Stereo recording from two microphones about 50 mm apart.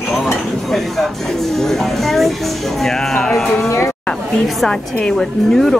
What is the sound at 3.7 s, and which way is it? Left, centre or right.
Speech, left.